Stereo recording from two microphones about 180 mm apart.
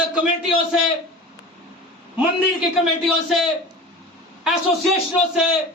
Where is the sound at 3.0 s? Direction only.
Centre (ahead or behind).